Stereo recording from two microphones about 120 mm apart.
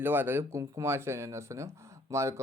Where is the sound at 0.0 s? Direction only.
15° right (ahead or behind).